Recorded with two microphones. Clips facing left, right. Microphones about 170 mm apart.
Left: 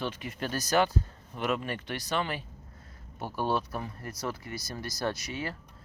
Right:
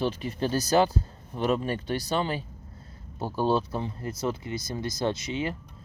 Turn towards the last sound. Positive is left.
turn(degrees=-20)  # may be behind; listen again after turning